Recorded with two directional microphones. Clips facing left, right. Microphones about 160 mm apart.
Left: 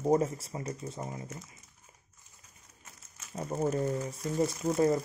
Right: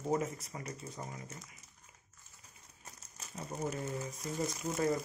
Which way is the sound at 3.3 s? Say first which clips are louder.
Left 8 dB; 35° left (ahead or behind).